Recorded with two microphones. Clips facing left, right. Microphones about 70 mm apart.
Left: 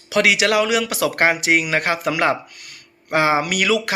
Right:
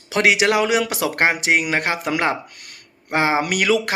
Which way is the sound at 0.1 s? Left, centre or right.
Right.